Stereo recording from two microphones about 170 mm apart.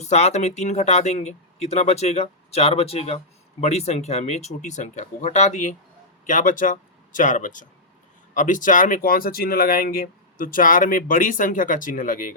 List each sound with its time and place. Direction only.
0.0 s speech: 40° left (ahead or behind)